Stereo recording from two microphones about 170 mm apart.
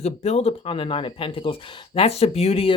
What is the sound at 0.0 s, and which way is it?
Speech, 40° left (ahead or behind).